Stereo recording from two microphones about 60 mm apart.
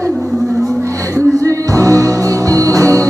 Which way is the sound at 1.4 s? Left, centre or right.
Right.